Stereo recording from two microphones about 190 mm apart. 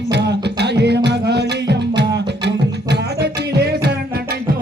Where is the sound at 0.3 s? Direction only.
65° right (ahead or behind).